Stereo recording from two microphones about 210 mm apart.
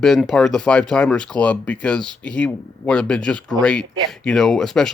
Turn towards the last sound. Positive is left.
turn(degrees=0)  # may be behind; listen again after turning